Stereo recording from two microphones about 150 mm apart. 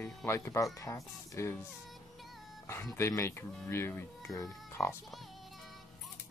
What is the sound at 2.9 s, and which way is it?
Speech, 15° left (ahead or behind).